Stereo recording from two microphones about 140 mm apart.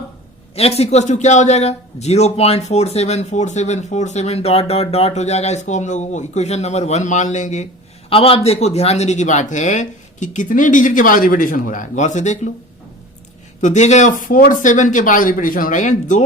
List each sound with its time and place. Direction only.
0.5 s a man's voice: 45° left (ahead or behind)
8.1 s speech: 45° left (ahead or behind)
13.6 s speech: 60° left (ahead or behind)